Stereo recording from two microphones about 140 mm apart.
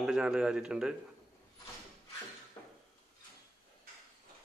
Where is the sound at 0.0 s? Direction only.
5° right (ahead or behind).